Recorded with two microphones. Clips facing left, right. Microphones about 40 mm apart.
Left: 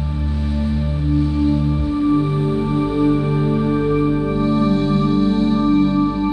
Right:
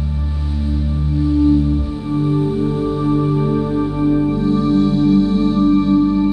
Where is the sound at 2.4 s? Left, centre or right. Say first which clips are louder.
Right 1 dB; left.